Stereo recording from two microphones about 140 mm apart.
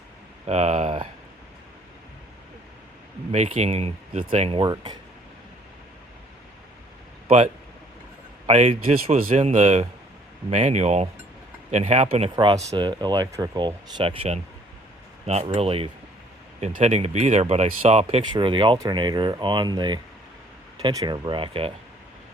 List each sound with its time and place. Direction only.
0.4 s speech: 50° right (ahead or behind)
3.3 s speech: 55° right (ahead or behind); by 4.9 s 30° right (ahead or behind)
7.3 s speech: 55° right (ahead or behind)
8.4 s speech: 45° right (ahead or behind)
12.7 s speech: 35° right (ahead or behind); by 18.2 s 50° right (ahead or behind)
18.3 s speech: 35° right (ahead or behind)